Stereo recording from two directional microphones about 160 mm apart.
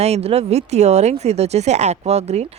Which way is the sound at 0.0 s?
40° right (ahead or behind).